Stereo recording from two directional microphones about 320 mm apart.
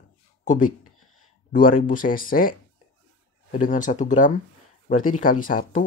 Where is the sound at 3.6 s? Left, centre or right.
Left.